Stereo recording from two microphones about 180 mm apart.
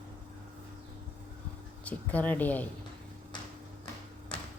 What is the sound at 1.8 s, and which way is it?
Speech, 10° left (ahead or behind).